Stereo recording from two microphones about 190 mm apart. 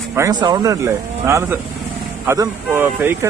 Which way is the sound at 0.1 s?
15° right (ahead or behind).